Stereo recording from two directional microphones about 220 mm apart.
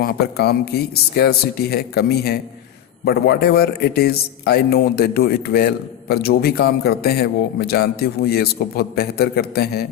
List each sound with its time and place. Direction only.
0.0 s a man's voice: 45° left (ahead or behind)